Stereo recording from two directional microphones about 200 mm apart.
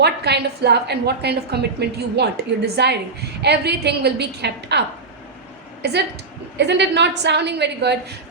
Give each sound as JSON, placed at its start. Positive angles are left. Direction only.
{"t": 0.0, "sound": "a woman's voice", "side_deg": -55}
{"t": 5.8, "sound": "a woman's voice", "side_deg": -55}